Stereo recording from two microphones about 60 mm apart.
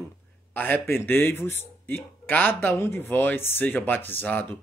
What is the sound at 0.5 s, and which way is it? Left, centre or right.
A man's voice, left.